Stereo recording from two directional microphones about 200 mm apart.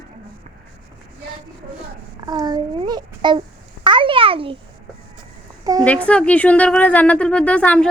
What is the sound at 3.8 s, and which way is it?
Babbling, 25° right (ahead or behind).